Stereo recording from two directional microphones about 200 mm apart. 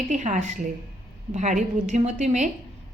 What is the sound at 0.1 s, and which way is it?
A woman's voice, 40° right (ahead or behind).